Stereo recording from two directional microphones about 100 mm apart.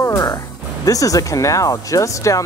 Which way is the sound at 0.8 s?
35° left (ahead or behind).